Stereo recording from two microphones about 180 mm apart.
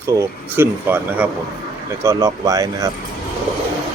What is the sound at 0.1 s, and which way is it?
Speech, 15° right (ahead or behind).